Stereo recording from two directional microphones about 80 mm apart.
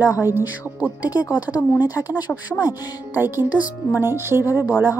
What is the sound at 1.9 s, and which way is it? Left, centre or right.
Speech, left.